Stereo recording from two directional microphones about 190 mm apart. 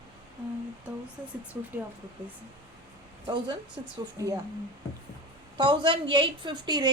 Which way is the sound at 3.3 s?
25° right (ahead or behind).